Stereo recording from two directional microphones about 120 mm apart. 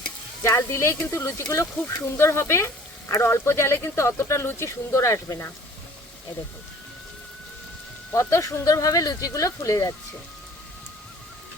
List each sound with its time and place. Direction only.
0.4 s speech: 25° left (ahead or behind)
8.1 s speech: 25° left (ahead or behind)